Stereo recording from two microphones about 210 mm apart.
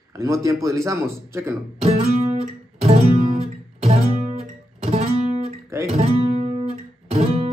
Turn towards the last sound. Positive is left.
turn(degrees=-30)  # may be behind; listen again after turning